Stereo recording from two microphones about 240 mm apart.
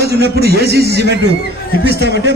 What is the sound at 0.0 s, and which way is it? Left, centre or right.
A man's voice, right.